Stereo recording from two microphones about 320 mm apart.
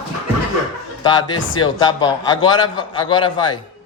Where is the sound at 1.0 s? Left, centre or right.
Centre.